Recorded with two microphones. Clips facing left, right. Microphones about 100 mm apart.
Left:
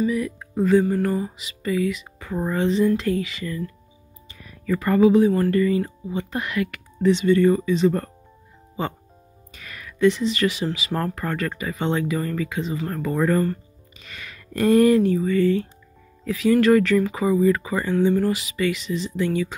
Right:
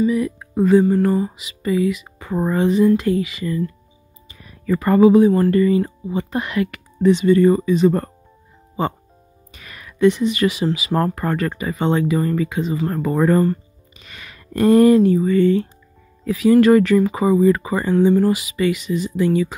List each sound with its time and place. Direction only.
0.1 s music: 20° right (ahead or behind)
2.1 s speech: 25° right (ahead or behind)
2.7 s music: 10° right (ahead or behind)
4.6 s speech: 30° right (ahead or behind)
7.2 s speech: 30° right (ahead or behind)
9.5 s speech: 20° right (ahead or behind)